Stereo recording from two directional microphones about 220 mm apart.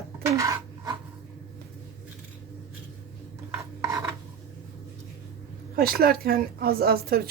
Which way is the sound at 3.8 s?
15° right (ahead or behind).